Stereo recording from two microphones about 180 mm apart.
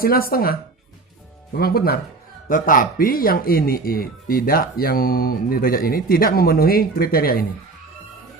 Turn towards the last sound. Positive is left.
turn(degrees=55)  # may be behind; listen again after turning